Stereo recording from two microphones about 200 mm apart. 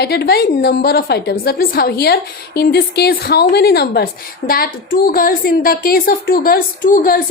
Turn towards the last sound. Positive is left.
turn(degrees=45)  # may be behind; listen again after turning